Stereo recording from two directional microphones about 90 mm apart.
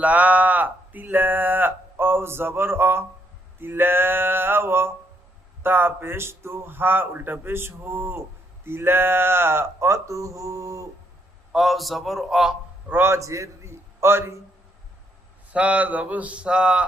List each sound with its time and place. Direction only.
0.0 s speech: 15° right (ahead or behind); by 10.8 s 35° right (ahead or behind)
11.5 s a man's voice: centre (ahead or behind)
12.9 s a man's voice: 30° right (ahead or behind)
15.5 s a sound: 15° right (ahead or behind)